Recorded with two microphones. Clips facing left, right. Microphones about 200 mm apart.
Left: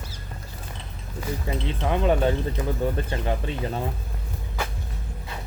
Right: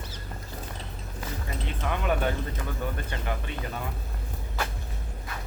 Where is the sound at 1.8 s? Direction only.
25° left (ahead or behind).